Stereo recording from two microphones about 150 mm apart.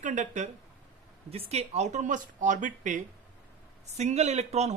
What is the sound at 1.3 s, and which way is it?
Speech, 45° right (ahead or behind).